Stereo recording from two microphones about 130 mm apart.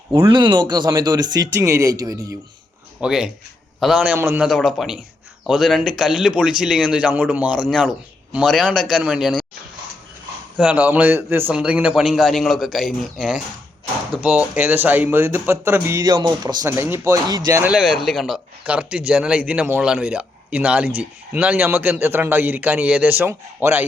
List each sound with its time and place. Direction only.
0.1 s speech: 35° right (ahead or behind)
3.0 s a man's voice: 5° right (ahead or behind)
4.4 s speech: centre (ahead or behind)
10.6 s speech: 10° right (ahead or behind); by 16.6 s 35° right (ahead or behind)
16.6 s a man's voice: 20° right (ahead or behind)
17.2 s speech: 30° right (ahead or behind)
17.6 s speech: 5° right (ahead or behind)
18.6 s a man's voice: 10° right (ahead or behind)